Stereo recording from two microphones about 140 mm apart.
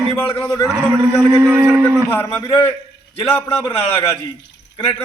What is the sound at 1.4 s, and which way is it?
Speech, 15° right (ahead or behind).